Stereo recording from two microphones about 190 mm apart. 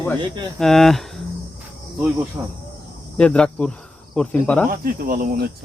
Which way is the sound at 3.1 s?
5° left (ahead or behind).